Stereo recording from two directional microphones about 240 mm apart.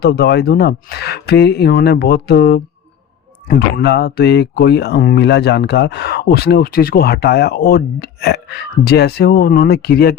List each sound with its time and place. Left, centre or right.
0.0 s speech: left